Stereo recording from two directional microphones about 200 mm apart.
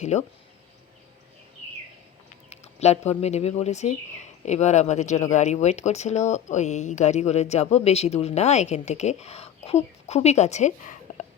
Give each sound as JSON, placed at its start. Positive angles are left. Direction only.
{"t": 0.0, "sound": "speech", "side_deg": 35}
{"t": 2.5, "sound": "speech", "side_deg": 35}